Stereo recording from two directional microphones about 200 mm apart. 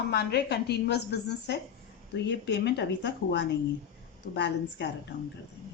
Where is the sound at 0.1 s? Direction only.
55° left (ahead or behind).